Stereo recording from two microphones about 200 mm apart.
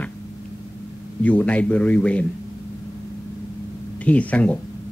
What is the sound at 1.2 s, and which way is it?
A man's voice, 5° left (ahead or behind).